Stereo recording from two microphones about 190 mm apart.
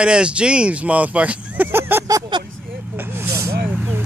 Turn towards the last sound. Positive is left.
turn(degrees=-10)  # may be behind; listen again after turning